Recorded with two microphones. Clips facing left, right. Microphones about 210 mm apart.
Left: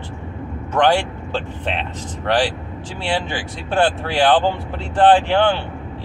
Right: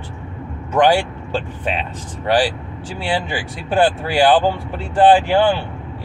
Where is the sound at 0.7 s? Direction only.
10° right (ahead or behind).